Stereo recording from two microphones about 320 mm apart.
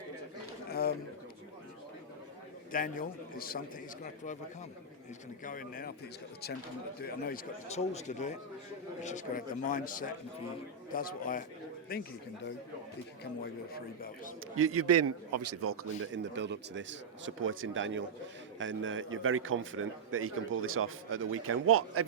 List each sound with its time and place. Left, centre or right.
0.7 s a sound: left
2.7 s a man's voice: left
5.4 s a man's voice: left
7.0 s a man's voice: left
13.4 s a man's voice: left
14.5 s a man's voice: right